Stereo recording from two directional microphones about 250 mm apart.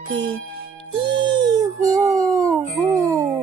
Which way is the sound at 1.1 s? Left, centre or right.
Centre.